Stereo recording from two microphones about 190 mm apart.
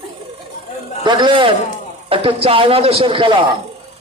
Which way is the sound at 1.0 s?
25° right (ahead or behind).